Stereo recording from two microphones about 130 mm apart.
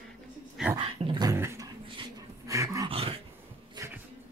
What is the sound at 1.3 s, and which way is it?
Dog, 20° right (ahead or behind).